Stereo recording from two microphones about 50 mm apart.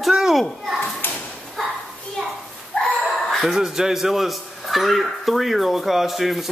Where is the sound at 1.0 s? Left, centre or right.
Left.